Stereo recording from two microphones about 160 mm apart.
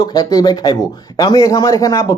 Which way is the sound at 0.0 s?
25° left (ahead or behind).